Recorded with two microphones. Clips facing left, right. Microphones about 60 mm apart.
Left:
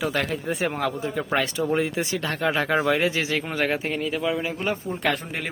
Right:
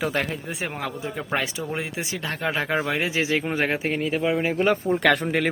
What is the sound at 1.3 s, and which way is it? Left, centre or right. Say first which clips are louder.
Speech: left 4 dB; centre.